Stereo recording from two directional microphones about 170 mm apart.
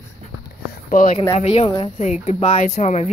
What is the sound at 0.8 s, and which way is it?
Speech, 50° left (ahead or behind).